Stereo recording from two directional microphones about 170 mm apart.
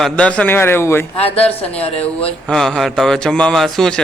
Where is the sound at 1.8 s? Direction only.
35° left (ahead or behind).